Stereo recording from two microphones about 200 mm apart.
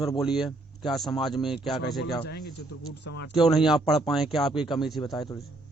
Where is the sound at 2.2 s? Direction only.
55° left (ahead or behind).